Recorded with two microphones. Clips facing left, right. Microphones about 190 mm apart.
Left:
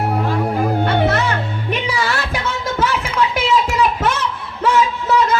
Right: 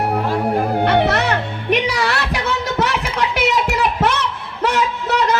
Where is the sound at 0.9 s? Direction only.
65° right (ahead or behind).